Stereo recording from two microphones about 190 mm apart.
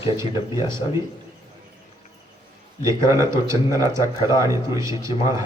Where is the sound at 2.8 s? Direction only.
15° right (ahead or behind).